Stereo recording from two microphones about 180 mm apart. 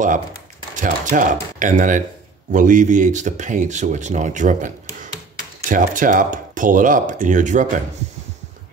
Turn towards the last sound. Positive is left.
turn(degrees=-45)  # may be behind; listen again after turning